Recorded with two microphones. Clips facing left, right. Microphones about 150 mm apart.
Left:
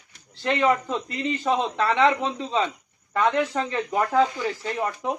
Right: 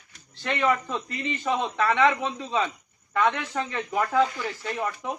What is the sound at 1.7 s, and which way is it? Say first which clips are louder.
Speech: right 1 dB; 30° left (ahead or behind).